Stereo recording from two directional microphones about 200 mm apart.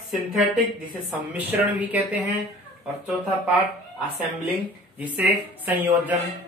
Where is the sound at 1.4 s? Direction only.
10° right (ahead or behind).